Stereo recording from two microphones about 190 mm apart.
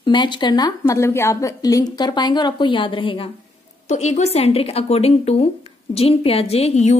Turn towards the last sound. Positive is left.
turn(degrees=35)  # may be behind; listen again after turning